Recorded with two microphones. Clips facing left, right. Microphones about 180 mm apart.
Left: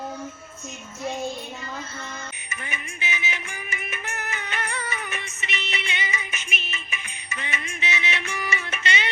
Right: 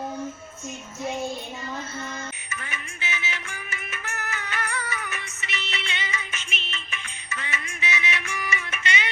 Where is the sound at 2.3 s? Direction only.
15° left (ahead or behind).